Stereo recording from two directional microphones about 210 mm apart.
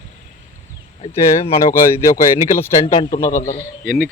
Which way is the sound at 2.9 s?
20° left (ahead or behind).